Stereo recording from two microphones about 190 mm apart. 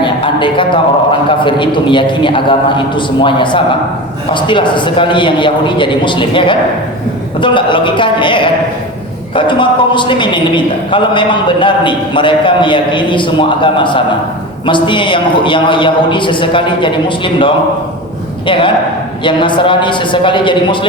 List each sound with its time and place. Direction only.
0.0 s a man's voice: 25° left (ahead or behind)